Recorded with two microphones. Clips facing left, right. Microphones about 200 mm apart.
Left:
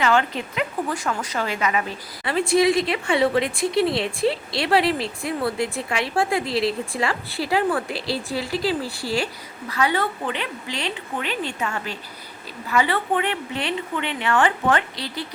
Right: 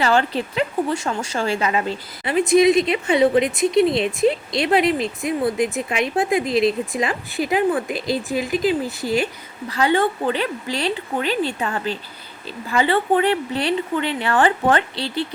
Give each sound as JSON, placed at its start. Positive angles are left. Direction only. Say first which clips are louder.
{"t": 0.0, "sound": "a woman's voice", "louder": "right 2 dB", "side_deg": -35}